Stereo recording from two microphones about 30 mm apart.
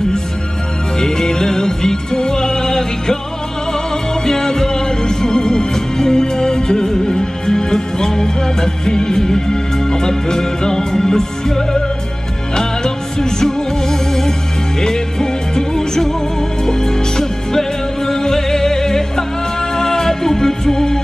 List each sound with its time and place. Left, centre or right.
0.9 s music: centre